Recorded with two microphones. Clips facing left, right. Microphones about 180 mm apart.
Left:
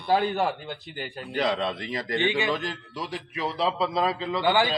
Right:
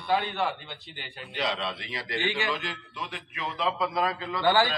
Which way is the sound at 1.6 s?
45° left (ahead or behind).